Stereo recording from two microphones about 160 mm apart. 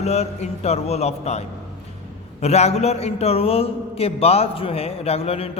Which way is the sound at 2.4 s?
40° left (ahead or behind).